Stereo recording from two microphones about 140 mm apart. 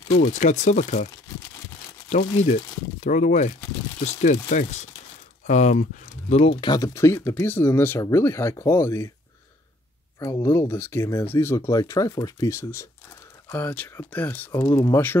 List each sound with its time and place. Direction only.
0.2 s speech: 60° left (ahead or behind)
2.0 s speech: 60° left (ahead or behind)
6.6 s speech: 25° left (ahead or behind)
10.1 s speech: 20° left (ahead or behind)